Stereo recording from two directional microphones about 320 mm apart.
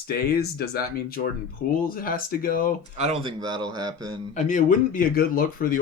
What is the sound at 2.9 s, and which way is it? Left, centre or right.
A man's voice, centre.